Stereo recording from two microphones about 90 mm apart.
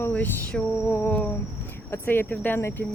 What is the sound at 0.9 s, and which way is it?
Speech, 30° left (ahead or behind).